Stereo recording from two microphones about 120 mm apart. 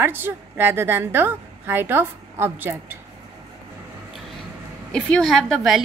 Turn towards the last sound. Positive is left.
turn(degrees=0)  # may be behind; listen again after turning